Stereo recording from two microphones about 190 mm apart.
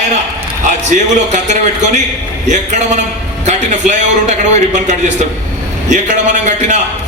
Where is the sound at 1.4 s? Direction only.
40° right (ahead or behind).